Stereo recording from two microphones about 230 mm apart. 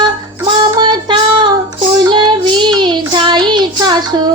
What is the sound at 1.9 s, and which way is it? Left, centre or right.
Child singing, centre.